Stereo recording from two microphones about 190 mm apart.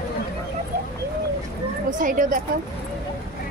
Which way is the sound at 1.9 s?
45° right (ahead or behind).